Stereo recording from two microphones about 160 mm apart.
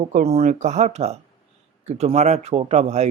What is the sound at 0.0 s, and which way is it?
Speech, 45° right (ahead or behind).